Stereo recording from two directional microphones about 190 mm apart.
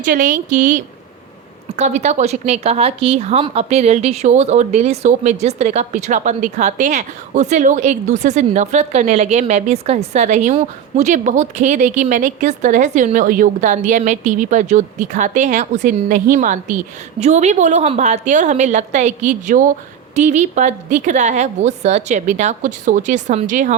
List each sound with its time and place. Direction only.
0.0 s a woman's voice: 45° right (ahead or behind)